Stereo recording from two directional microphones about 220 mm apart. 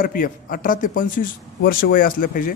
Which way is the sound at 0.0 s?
40° left (ahead or behind).